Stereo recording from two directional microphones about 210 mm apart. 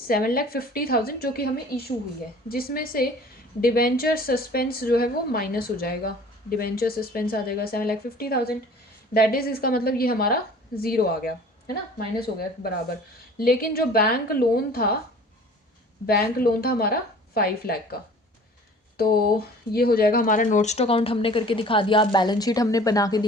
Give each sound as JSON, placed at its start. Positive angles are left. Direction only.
{"t": 0.1, "sound": "a woman's voice", "side_deg": 45}
{"t": 16.0, "sound": "a woman's voice", "side_deg": 45}